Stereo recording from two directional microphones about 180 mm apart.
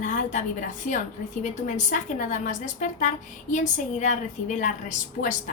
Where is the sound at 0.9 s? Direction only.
45° left (ahead or behind).